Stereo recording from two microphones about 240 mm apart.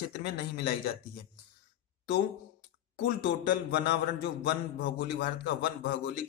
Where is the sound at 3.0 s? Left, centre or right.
Left.